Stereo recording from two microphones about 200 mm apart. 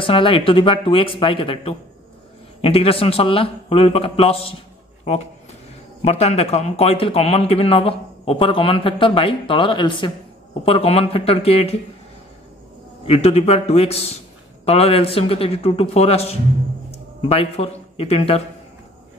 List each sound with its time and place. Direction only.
0.0 s a man's voice: 25° left (ahead or behind)
6.0 s a man's voice: 30° left (ahead or behind)
13.0 s a man's voice: 30° left (ahead or behind)